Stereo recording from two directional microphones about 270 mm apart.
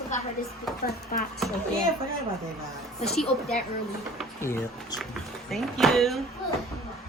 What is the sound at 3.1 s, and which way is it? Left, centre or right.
Speech, centre.